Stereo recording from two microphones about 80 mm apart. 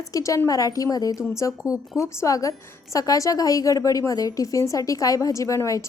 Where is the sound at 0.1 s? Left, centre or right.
Left.